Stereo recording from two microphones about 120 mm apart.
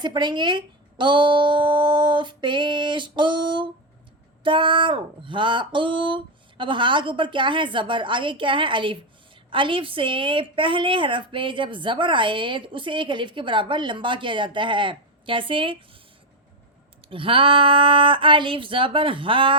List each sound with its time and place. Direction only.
0.0 s speech: 40° right (ahead or behind)
17.1 s speech: 45° right (ahead or behind)